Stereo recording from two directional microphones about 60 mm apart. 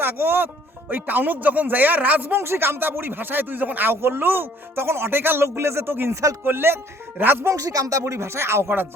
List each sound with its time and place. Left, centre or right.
0.0 s speech: right
2.3 s speech: right
7.4 s speech: right
8.0 s speech: right